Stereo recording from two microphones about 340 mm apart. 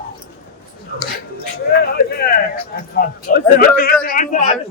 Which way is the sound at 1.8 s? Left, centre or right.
Left.